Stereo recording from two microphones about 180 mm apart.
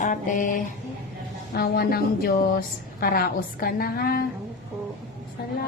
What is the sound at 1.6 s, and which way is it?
A woman's voice, 60° left (ahead or behind).